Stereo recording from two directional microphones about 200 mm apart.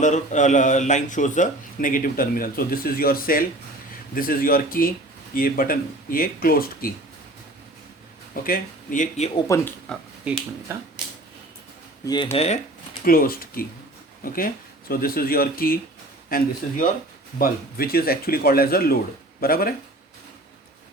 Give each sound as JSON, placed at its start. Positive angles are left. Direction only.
{"t": 0.0, "sound": "speech", "side_deg": 40}
{"t": 8.3, "sound": "speech", "side_deg": 45}
{"t": 9.5, "sound": "speech", "side_deg": 10}
{"t": 12.0, "sound": "speech", "side_deg": 25}
{"t": 13.1, "sound": "speech", "side_deg": 45}